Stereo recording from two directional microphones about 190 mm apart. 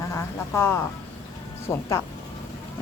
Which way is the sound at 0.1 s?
15° left (ahead or behind).